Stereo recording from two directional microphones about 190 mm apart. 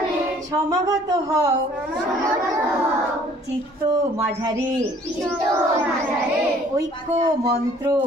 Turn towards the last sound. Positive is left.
turn(degrees=-20)  # may be behind; listen again after turning